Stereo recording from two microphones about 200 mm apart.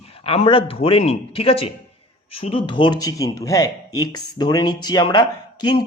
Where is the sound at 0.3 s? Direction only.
30° left (ahead or behind).